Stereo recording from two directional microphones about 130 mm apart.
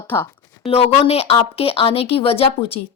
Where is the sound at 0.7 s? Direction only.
50° left (ahead or behind).